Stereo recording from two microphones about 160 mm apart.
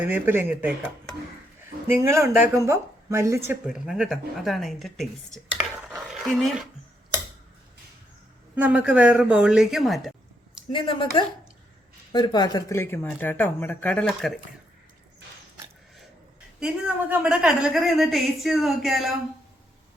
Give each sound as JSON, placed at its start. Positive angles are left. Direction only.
{"t": 0.0, "sound": "speech", "side_deg": -10}
{"t": 1.9, "sound": "speech", "side_deg": -15}
{"t": 3.7, "sound": "speech", "side_deg": -5}
{"t": 8.5, "sound": "speech", "side_deg": -10}
{"t": 10.7, "sound": "speech", "side_deg": 30}
{"t": 12.1, "sound": "speech", "side_deg": 25}
{"t": 16.6, "sound": "a woman's voice", "side_deg": -5}